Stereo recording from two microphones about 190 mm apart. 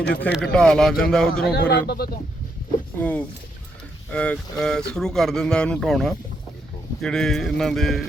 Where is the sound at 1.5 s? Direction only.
60° left (ahead or behind).